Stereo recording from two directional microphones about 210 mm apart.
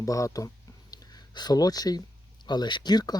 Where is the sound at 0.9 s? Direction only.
20° left (ahead or behind).